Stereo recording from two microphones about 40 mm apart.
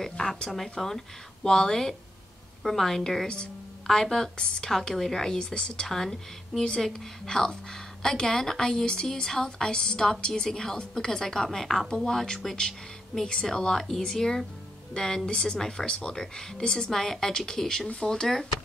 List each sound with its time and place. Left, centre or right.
0.0 s a woman's voice: centre